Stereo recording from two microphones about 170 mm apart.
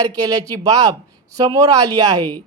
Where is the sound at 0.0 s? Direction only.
20° right (ahead or behind).